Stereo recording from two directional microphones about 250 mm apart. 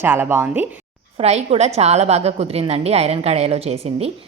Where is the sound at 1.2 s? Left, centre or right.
Right.